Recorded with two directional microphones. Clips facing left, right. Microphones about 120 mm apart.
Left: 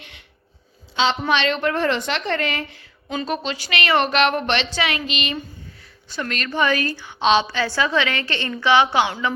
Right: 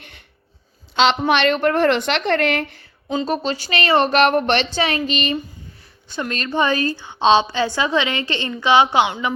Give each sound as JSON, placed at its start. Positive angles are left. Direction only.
{"t": 0.0, "sound": "a sound", "side_deg": -45}
{"t": 1.3, "sound": "a woman's voice", "side_deg": -55}
{"t": 3.2, "sound": "a woman's voice", "side_deg": -35}
{"t": 6.1, "sound": "a woman's voice", "side_deg": -25}